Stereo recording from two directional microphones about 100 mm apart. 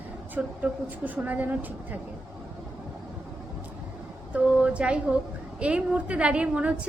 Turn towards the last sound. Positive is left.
turn(degrees=-10)  # may be behind; listen again after turning